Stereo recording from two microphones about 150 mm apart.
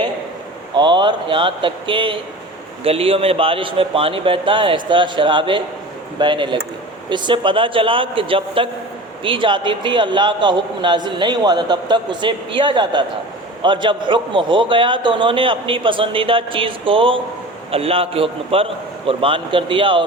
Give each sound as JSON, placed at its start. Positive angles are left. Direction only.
{"t": 0.7, "sound": "a man's voice", "side_deg": -30}